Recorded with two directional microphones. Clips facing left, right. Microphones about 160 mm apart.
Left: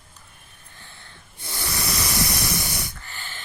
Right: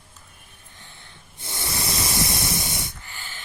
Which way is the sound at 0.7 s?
15° right (ahead or behind).